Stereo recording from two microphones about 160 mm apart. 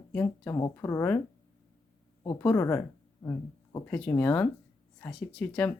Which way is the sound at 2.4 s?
10° left (ahead or behind).